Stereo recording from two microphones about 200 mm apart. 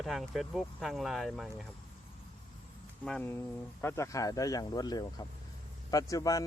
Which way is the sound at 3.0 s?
5° left (ahead or behind).